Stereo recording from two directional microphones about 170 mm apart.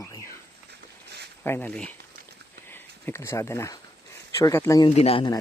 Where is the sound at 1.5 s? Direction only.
10° left (ahead or behind).